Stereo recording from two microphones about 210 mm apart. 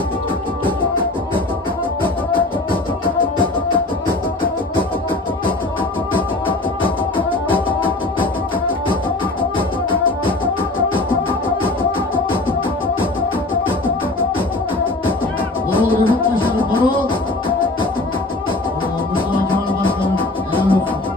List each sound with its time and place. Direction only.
2.3 s music: 25° left (ahead or behind)
6.1 s music: 25° left (ahead or behind)
9.4 s music: 25° left (ahead or behind)
16.0 s music: 25° left (ahead or behind)
19.1 s music: 25° left (ahead or behind)